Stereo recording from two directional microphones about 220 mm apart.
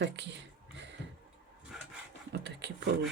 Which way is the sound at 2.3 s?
50° right (ahead or behind).